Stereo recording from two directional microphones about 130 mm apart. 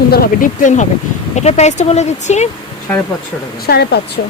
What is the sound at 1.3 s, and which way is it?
Speech, 60° left (ahead or behind).